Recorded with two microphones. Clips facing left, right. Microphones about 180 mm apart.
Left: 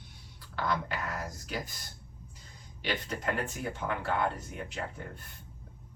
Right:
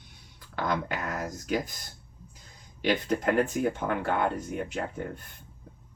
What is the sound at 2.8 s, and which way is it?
Speech, 50° right (ahead or behind).